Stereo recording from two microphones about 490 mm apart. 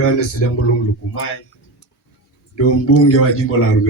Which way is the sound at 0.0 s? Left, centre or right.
Left.